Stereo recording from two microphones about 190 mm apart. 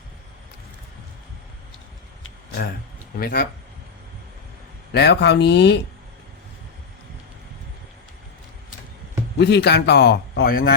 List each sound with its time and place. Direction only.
3.2 s speech: 50° left (ahead or behind)
4.9 s a man's voice: 60° left (ahead or behind)
9.4 s a man's voice: 60° left (ahead or behind)